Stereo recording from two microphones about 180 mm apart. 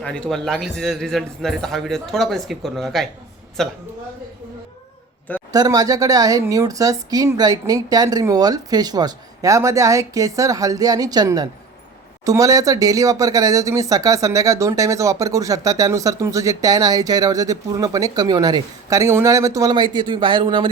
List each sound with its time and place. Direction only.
0.0 s a man's voice: 5° left (ahead or behind)
5.5 s speech: 20° right (ahead or behind)